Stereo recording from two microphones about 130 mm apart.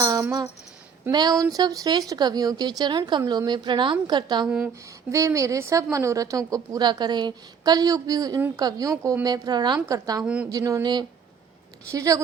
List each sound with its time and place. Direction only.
0.0 s a sound: 25° right (ahead or behind)
1.1 s speech: 30° right (ahead or behind)
4.4 s speech: 10° right (ahead or behind)
5.1 s a woman's voice: 25° right (ahead or behind)
10.2 s speech: 10° right (ahead or behind)
10.5 s a woman's voice: 25° right (ahead or behind)